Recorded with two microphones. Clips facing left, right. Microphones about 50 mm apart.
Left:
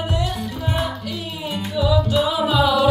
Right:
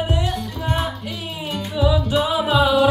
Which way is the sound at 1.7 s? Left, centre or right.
Centre.